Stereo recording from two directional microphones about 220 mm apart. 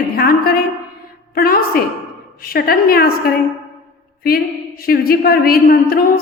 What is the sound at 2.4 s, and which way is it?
A man's voice, 40° left (ahead or behind).